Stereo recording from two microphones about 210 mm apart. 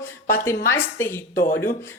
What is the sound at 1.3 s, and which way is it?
Speech, 45° left (ahead or behind).